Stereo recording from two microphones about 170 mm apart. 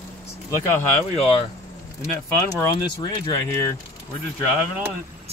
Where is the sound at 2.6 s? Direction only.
25° left (ahead or behind).